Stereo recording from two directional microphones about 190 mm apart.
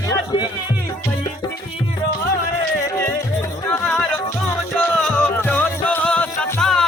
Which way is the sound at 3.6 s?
5° left (ahead or behind).